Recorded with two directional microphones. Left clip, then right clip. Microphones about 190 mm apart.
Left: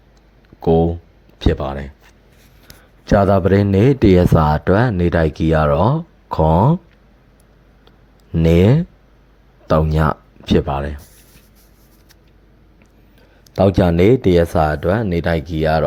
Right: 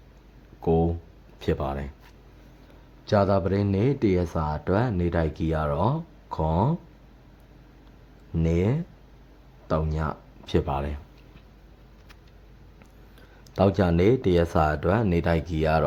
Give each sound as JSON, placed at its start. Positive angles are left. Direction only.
{"t": 0.6, "sound": "speech", "side_deg": 25}
{"t": 3.1, "sound": "speech", "side_deg": 30}
{"t": 8.4, "sound": "speech", "side_deg": 40}
{"t": 13.6, "sound": "speech", "side_deg": 25}